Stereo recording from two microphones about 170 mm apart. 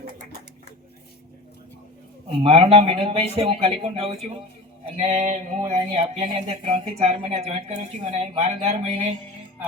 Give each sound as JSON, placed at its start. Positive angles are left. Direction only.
{"t": 2.4, "sound": "speech", "side_deg": -35}